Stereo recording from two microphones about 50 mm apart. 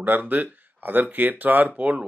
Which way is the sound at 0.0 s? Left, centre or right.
Right.